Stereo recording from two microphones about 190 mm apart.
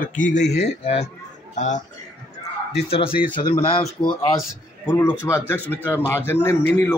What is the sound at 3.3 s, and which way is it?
Speech, 20° left (ahead or behind).